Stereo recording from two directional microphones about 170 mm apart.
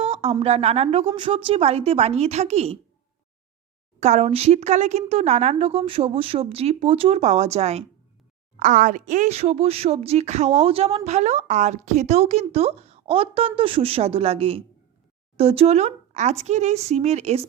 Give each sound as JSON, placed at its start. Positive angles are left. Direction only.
{"t": 0.0, "sound": "a woman's voice", "side_deg": -35}
{"t": 4.0, "sound": "a woman's voice", "side_deg": -40}
{"t": 8.5, "sound": "a woman's voice", "side_deg": -50}